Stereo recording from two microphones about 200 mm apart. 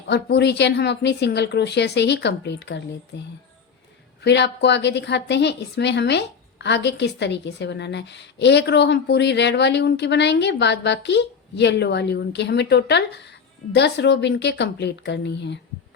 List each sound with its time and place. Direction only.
0.1 s a woman's voice: 55° left (ahead or behind)